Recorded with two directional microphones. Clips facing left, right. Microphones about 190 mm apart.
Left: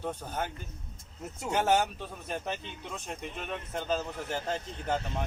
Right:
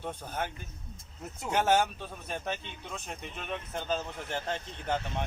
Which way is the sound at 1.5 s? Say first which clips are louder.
Even; centre (ahead or behind).